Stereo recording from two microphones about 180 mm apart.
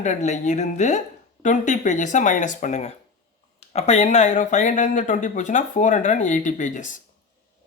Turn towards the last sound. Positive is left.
turn(degrees=45)  # may be behind; listen again after turning